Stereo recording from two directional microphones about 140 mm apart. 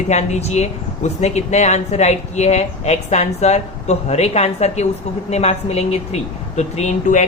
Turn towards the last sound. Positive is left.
turn(degrees=60)  # may be behind; listen again after turning